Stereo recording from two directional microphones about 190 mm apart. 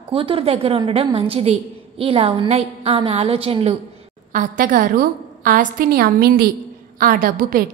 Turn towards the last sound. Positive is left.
turn(degrees=-50)  # may be behind; listen again after turning